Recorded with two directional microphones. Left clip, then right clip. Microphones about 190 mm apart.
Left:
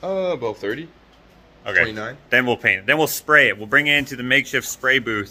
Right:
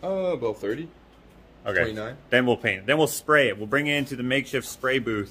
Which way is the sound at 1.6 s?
30° right (ahead or behind).